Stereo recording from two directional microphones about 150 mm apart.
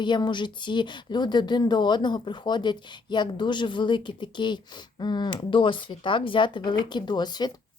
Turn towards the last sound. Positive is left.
turn(degrees=30)  # may be behind; listen again after turning